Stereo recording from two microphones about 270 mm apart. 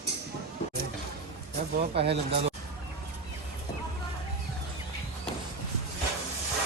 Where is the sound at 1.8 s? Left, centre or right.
Right.